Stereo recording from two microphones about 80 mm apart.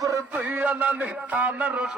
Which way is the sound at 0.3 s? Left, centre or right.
Right.